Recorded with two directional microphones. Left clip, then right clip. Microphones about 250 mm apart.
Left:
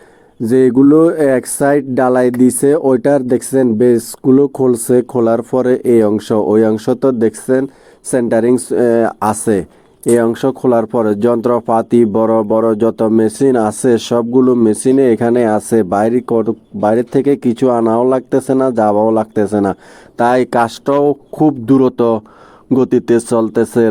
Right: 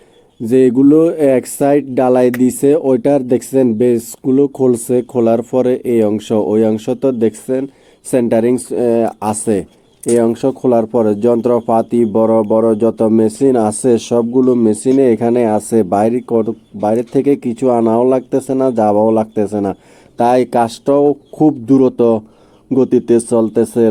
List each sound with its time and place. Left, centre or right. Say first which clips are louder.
0.4 s speech: even; centre